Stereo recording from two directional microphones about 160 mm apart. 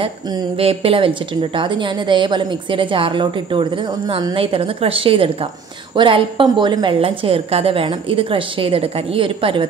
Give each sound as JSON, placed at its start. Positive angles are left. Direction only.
{"t": 0.6, "sound": "a woman's voice", "side_deg": -35}